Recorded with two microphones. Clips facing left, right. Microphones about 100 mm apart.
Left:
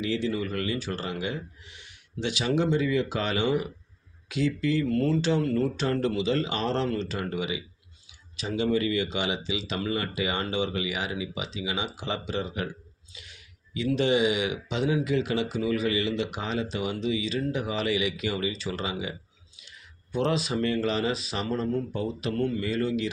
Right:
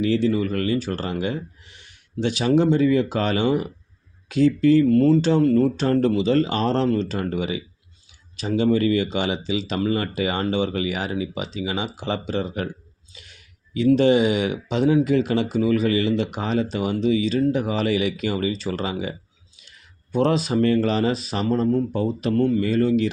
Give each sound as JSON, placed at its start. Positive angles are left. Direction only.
{"t": 0.0, "sound": "speech", "side_deg": -40}
{"t": 20.1, "sound": "speech", "side_deg": -45}